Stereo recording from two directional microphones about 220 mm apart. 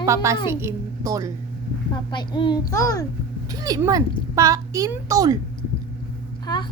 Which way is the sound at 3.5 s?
15° right (ahead or behind).